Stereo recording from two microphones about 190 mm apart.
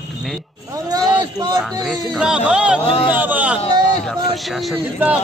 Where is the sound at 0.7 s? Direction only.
20° right (ahead or behind).